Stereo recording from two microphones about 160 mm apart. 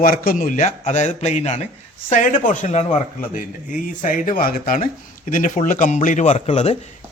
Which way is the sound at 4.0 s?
55° left (ahead or behind).